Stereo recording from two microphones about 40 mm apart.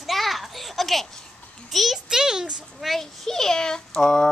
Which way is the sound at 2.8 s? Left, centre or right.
Centre.